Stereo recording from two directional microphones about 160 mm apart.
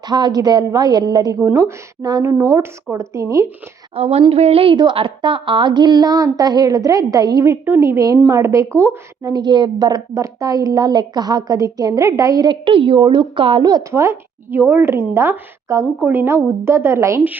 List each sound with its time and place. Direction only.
0.1 s a woman's voice: 25° right (ahead or behind)
3.9 s a woman's voice: 40° right (ahead or behind); by 17.3 s 15° right (ahead or behind)